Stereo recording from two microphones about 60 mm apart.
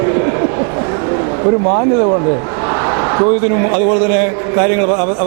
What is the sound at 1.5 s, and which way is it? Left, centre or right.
Speech, right.